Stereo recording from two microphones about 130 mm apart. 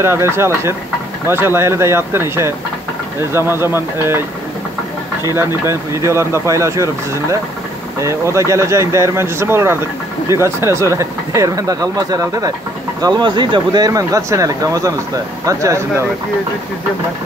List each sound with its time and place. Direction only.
0.0 s speech: 20° right (ahead or behind)
5.2 s speech: 20° right (ahead or behind)